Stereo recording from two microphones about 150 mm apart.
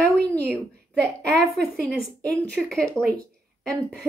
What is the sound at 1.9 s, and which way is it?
Speech, 90° right.